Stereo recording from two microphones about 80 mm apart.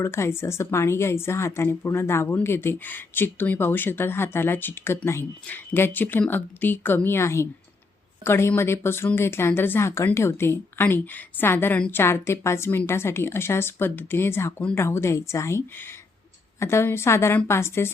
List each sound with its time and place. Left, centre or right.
0.0 s a woman's voice: left